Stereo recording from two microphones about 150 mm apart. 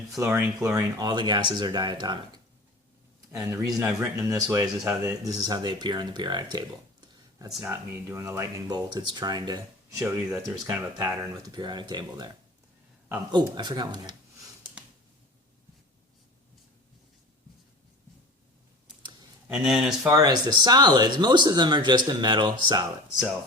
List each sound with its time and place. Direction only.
0.2 s speech: 20° right (ahead or behind)
3.5 s speech: 20° right (ahead or behind)
7.1 s a sound: 20° right (ahead or behind)
7.7 s speech: 15° right (ahead or behind)
13.3 s speech: 30° right (ahead or behind)
19.5 s speech: 5° right (ahead or behind)
20.1 s speech: 25° right (ahead or behind)